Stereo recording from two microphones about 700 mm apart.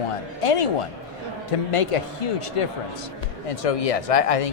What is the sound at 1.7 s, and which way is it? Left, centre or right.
A man's voice, left.